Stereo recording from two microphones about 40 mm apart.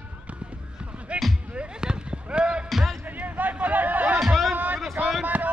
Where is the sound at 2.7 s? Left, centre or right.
Centre.